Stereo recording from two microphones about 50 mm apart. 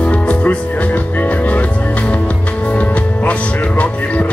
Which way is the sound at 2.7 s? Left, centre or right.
Left.